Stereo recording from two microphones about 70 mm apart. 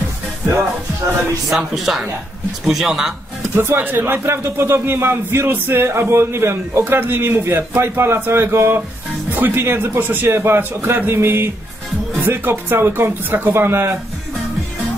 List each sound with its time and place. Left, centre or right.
1.5 s speech: centre
3.5 s speech: right